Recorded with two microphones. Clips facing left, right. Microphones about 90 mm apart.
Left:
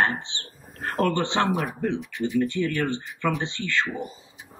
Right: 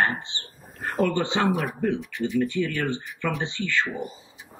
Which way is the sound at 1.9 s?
20° left (ahead or behind).